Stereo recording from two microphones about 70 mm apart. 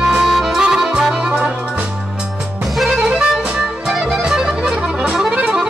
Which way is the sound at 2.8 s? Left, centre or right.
Centre.